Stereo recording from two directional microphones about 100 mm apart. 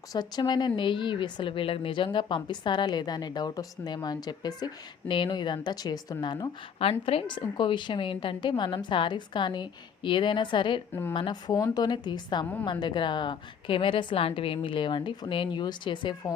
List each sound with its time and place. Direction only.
0.1 s a woman's voice: 45° left (ahead or behind)
7.0 s a woman's voice: 65° left (ahead or behind)